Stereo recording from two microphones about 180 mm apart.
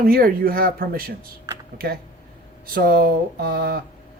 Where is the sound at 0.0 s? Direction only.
55° right (ahead or behind).